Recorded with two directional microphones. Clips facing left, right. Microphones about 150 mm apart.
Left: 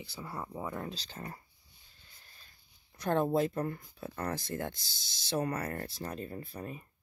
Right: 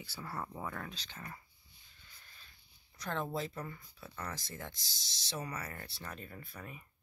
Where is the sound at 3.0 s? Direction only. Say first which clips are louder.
Left 9 dB; 50° left (ahead or behind); by 6.9 s 35° left (ahead or behind).